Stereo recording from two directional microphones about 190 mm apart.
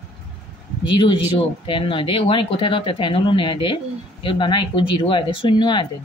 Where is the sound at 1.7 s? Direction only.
25° left (ahead or behind).